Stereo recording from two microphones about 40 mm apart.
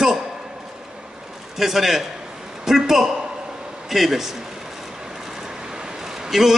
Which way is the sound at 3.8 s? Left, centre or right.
Centre.